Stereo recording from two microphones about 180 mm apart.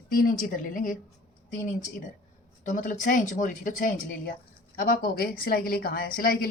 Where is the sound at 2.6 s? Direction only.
45° left (ahead or behind).